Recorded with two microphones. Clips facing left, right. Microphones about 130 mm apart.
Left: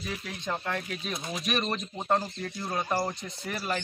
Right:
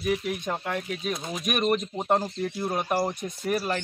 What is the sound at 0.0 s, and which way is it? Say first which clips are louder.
Speech: right 9 dB; 15° right (ahead or behind).